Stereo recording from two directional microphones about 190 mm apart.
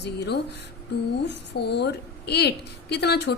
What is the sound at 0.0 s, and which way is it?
A woman's voice, 65° left (ahead or behind).